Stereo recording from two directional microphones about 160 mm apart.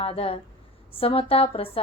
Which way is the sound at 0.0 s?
35° left (ahead or behind).